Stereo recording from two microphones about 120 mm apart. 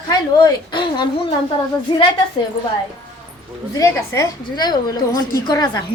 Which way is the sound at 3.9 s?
25° left (ahead or behind).